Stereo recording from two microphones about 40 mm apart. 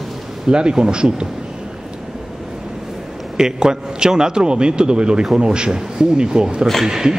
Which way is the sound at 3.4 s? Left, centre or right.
Centre.